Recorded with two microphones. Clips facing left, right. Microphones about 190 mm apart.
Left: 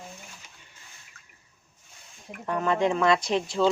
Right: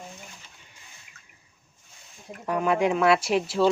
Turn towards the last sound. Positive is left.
turn(degrees=-5)  # may be behind; listen again after turning